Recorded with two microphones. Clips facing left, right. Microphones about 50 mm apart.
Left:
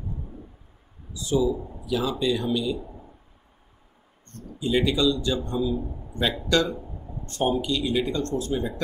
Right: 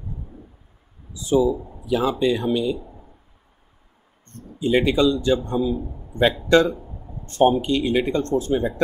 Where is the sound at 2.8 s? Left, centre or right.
Centre.